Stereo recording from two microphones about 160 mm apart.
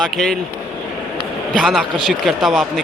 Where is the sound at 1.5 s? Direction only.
Centre (ahead or behind).